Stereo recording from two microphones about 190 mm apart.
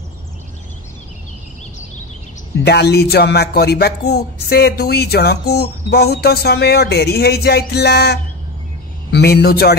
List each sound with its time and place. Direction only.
2.6 s a man's voice: 60° left (ahead or behind)